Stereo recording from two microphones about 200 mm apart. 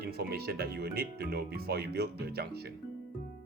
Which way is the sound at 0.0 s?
50° right (ahead or behind).